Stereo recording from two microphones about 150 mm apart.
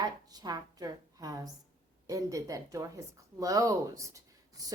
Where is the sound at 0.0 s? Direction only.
25° right (ahead or behind).